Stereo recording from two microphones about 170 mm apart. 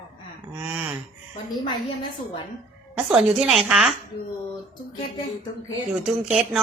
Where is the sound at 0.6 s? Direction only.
10° right (ahead or behind).